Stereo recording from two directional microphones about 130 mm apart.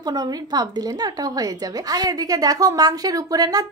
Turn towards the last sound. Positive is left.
turn(degrees=-30)  # may be behind; listen again after turning